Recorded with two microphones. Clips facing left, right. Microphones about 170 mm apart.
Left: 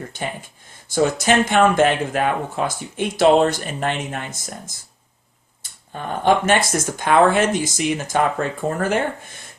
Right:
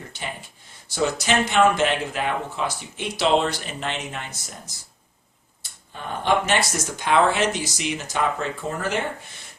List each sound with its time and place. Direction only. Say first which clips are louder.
0.9 s speech: left 5 dB; 50° left (ahead or behind)
5.9 s speech: left 5 dB; 50° left (ahead or behind)